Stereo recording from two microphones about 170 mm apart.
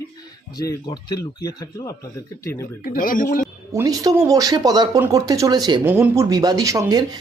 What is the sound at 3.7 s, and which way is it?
Speech, 20° right (ahead or behind).